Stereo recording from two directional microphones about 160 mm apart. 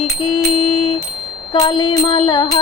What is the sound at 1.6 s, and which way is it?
Bicycle bell, 25° left (ahead or behind).